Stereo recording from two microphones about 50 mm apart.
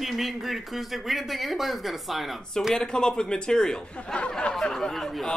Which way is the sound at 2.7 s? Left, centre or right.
Centre.